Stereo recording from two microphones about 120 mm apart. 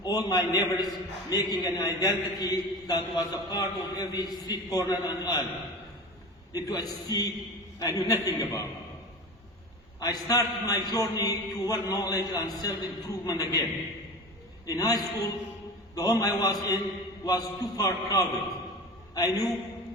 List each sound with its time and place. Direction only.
0.0 s a man's voice: 35° left (ahead or behind)
6.5 s a man's voice: 30° left (ahead or behind)
10.0 s a man's voice: 30° left (ahead or behind)
14.7 s a man's voice: 30° left (ahead or behind)